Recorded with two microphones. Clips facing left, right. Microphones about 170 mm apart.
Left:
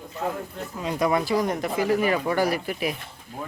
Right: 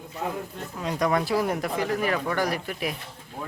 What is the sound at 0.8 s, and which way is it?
Speech, 5° left (ahead or behind).